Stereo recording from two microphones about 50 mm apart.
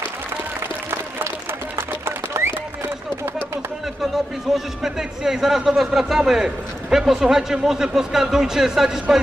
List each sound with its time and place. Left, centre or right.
0.6 s applause: right
1.8 s a sound: right
4.5 s a man's voice: centre